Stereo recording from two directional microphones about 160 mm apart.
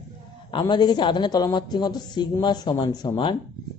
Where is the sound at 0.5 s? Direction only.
25° left (ahead or behind).